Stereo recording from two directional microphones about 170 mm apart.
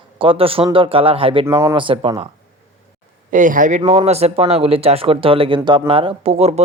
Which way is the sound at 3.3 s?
50° right (ahead or behind).